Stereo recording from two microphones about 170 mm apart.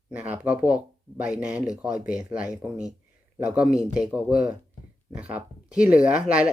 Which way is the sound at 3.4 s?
5° right (ahead or behind).